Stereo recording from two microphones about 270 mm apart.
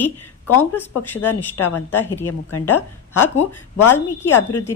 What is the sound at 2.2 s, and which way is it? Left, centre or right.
Speech, left.